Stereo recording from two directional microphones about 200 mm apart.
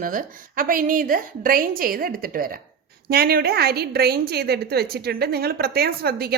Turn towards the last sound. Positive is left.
turn(degrees=-50)  # may be behind; listen again after turning